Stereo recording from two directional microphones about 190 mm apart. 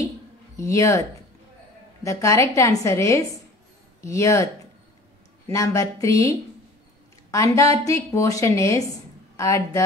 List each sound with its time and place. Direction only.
0.6 s speech: 15° left (ahead or behind)
2.0 s speech: 15° left (ahead or behind)
5.5 s speech: 15° left (ahead or behind)